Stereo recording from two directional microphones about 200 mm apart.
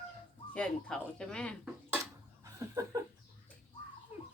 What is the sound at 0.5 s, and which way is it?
Speech, 5° left (ahead or behind).